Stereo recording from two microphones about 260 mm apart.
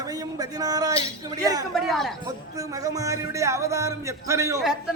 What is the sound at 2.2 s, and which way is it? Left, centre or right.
A man's voice, centre.